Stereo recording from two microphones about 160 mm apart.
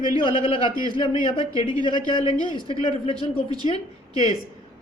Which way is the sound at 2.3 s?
25° right (ahead or behind).